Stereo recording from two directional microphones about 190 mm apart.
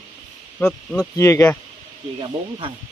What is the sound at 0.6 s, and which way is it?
Speech, 5° left (ahead or behind).